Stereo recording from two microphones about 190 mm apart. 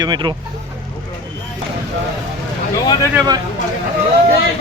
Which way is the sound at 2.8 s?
20° left (ahead or behind).